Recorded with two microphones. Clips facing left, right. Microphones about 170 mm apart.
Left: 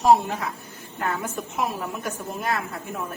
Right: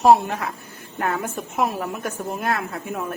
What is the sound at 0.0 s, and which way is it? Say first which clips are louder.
A woman's voice: right 3 dB; 65° right (ahead or behind).